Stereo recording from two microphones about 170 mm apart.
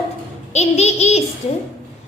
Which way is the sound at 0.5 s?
40° left (ahead or behind).